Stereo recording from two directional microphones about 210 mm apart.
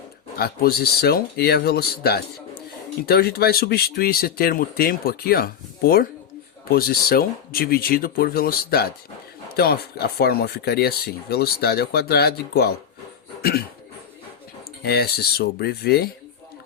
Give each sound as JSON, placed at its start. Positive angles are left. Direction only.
{"t": 0.3, "sound": "speech", "side_deg": 45}
{"t": 14.8, "sound": "speech", "side_deg": 50}